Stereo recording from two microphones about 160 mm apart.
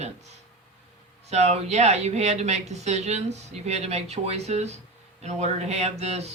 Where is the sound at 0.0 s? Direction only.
45° right (ahead or behind).